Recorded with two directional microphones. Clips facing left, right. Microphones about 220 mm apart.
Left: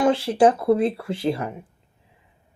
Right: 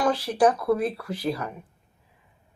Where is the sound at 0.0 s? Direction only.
25° left (ahead or behind).